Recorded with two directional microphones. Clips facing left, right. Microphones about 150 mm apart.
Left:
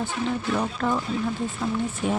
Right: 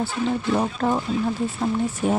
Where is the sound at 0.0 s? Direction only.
35° right (ahead or behind).